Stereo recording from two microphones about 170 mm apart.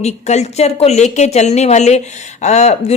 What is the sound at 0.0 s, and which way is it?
Speech, 40° left (ahead or behind).